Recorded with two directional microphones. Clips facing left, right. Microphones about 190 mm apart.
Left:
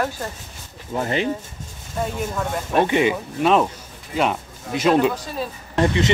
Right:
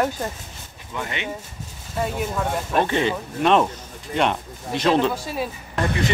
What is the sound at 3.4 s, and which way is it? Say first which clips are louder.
Speech: even; 5° left (ahead or behind).